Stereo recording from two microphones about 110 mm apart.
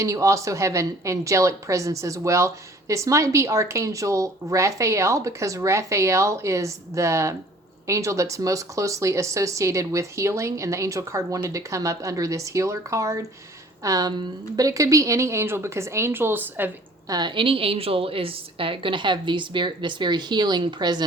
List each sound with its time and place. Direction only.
0.0 s a woman's voice: 30° right (ahead or behind)
17.1 s a woman's voice: 40° right (ahead or behind)